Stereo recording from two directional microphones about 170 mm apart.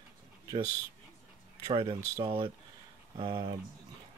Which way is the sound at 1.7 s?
35° right (ahead or behind).